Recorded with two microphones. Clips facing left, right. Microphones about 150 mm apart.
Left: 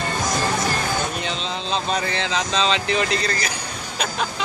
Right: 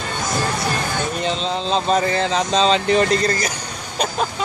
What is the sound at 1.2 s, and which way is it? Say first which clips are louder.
Speech: right 5 dB; 35° right (ahead or behind).